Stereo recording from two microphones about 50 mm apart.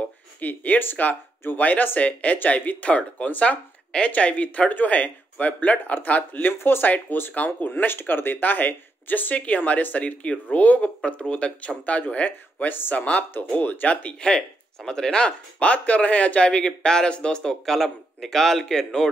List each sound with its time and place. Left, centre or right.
0.4 s speech: left
6.6 s speech: left
7.3 s speech: left
7.7 s speech: left
14.2 s a man's voice: centre